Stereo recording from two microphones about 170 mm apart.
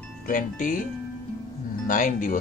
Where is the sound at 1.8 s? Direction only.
50° left (ahead or behind).